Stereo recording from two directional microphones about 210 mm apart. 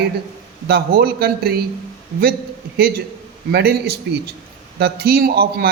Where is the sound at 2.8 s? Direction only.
50° right (ahead or behind).